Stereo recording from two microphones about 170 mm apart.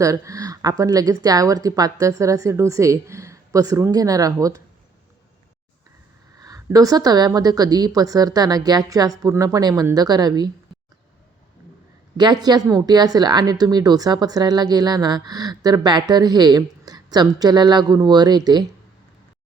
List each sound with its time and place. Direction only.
0.0 s a woman's voice: 20° right (ahead or behind)
6.4 s a woman's voice: 20° right (ahead or behind)
12.1 s a woman's voice: 25° right (ahead or behind)